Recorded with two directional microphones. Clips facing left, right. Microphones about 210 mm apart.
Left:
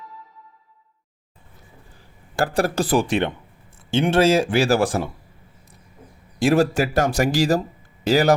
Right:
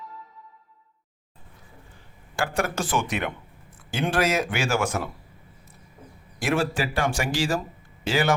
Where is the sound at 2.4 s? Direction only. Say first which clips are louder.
Left 6 dB; 35° left (ahead or behind).